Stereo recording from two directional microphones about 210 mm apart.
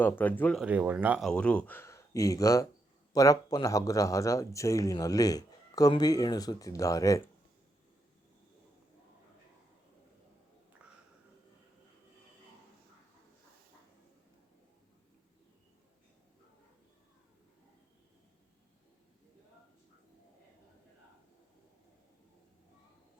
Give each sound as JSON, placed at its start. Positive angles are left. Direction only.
{"t": 0.0, "sound": "speech", "side_deg": 10}
{"t": 0.6, "sound": "speech", "side_deg": -5}
{"t": 1.3, "sound": "speech", "side_deg": 5}